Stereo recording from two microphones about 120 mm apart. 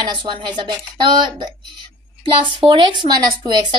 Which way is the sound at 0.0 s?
40° right (ahead or behind).